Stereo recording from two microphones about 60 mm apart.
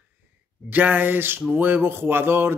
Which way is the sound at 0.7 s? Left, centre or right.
Right.